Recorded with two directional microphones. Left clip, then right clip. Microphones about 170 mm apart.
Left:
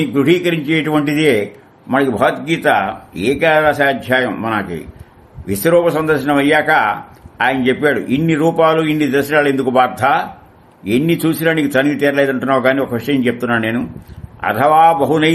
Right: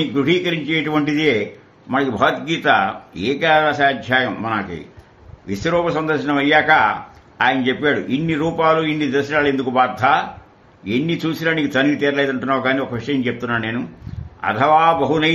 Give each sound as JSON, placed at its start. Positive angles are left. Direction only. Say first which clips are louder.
{"t": 0.1, "sound": "a man's voice", "louder": "left 4 dB", "side_deg": 35}